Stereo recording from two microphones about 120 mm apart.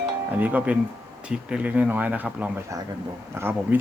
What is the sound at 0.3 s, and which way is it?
Speech, 15° right (ahead or behind).